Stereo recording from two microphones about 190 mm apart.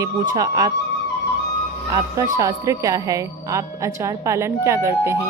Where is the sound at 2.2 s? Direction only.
20° right (ahead or behind).